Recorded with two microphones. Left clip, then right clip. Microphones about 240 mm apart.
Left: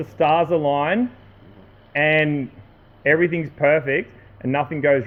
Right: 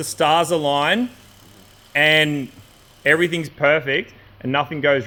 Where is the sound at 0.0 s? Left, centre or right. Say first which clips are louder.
Right 1 dB; right.